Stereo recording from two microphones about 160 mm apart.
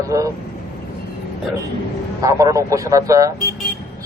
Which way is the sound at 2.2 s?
20° right (ahead or behind).